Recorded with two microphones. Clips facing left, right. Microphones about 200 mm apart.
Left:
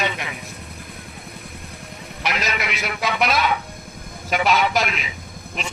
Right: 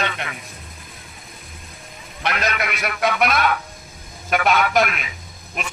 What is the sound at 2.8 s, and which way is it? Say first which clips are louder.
Speech: right 3 dB; 55° right (ahead or behind).